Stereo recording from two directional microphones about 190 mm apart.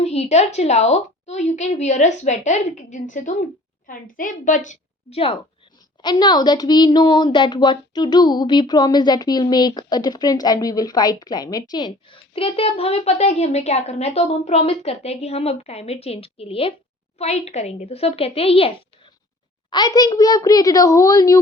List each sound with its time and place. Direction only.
0.0 s a child's voice: 35° left (ahead or behind)
19.7 s a woman's voice: 20° left (ahead or behind)